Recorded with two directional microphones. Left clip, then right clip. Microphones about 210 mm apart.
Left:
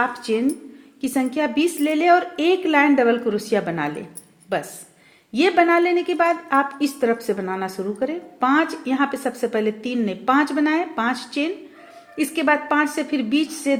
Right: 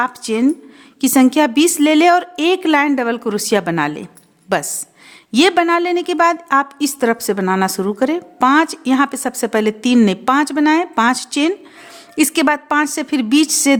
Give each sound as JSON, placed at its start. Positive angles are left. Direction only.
{"t": 0.0, "sound": "a woman's voice", "side_deg": -45}